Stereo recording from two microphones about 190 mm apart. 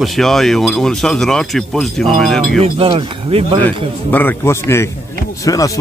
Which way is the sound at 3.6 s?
10° left (ahead or behind).